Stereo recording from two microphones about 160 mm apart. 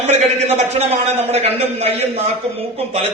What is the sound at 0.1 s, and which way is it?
A man's voice, 45° right (ahead or behind).